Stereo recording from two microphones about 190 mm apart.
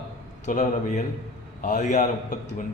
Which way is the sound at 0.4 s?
40° left (ahead or behind).